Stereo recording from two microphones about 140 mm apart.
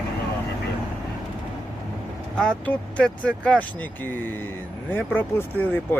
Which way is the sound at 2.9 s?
10° left (ahead or behind).